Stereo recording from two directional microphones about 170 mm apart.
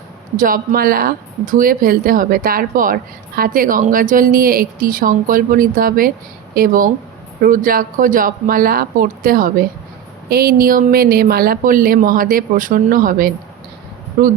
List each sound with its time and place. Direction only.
0.3 s speech: 55° right (ahead or behind)